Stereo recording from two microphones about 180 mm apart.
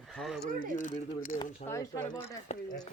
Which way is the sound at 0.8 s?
45° left (ahead or behind).